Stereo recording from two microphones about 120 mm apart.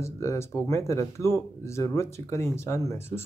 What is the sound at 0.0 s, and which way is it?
Speech, 25° left (ahead or behind).